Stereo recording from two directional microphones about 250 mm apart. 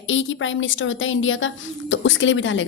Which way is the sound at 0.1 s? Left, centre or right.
Left.